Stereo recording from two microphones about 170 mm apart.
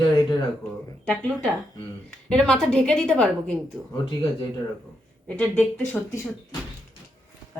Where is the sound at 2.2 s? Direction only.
5° left (ahead or behind).